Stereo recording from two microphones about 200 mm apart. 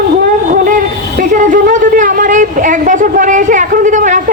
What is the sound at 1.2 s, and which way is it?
A woman's voice, 40° right (ahead or behind).